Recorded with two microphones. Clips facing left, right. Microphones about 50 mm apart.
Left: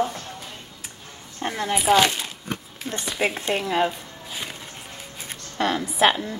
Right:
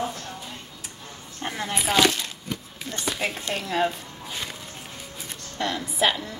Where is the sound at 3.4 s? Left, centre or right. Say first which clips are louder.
Left 1 dB; left.